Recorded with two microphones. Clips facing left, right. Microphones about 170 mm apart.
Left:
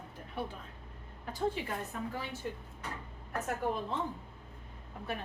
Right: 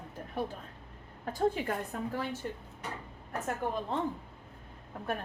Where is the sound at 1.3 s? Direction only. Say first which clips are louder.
Right 4 dB; 45° right (ahead or behind).